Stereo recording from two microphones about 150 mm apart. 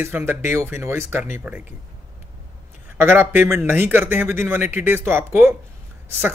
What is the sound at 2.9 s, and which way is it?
Speech, 15° right (ahead or behind).